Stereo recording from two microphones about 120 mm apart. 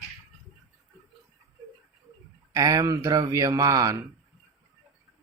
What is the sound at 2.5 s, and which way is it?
Speech, 30° right (ahead or behind).